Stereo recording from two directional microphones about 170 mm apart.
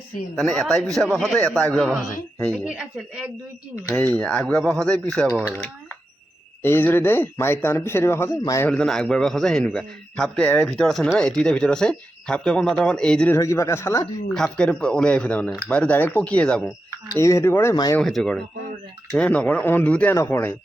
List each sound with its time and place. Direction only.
0.3 s a man's voice: centre (ahead or behind)
3.9 s a man's voice: 5° left (ahead or behind)
6.6 s speech: 10° left (ahead or behind)
8.7 s a man's voice: 5° left (ahead or behind)
13.3 s speech: 15° left (ahead or behind)
14.3 s a man's voice: 5° left (ahead or behind)
17.2 s speech: 15° left (ahead or behind)
17.9 s a man's voice: 5° left (ahead or behind)